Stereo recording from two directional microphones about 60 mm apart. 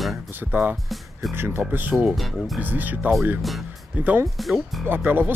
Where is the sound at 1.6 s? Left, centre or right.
Right.